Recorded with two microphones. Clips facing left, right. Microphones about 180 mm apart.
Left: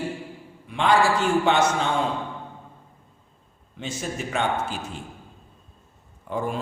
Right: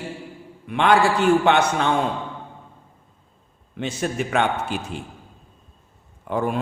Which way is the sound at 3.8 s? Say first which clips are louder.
Right 5 dB; 65° right (ahead or behind).